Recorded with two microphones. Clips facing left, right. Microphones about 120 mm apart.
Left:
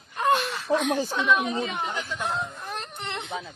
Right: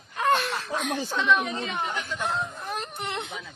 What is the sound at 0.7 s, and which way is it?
Speech, 70° left (ahead or behind).